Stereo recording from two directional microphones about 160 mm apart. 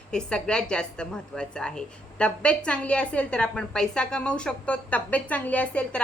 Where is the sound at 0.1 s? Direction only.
5° left (ahead or behind).